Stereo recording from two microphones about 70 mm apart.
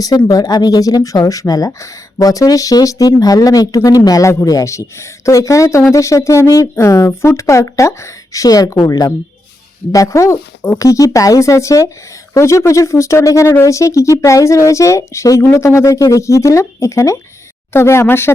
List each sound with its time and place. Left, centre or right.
0.3 s speech: left
9.9 s speech: left
10.8 s speech: left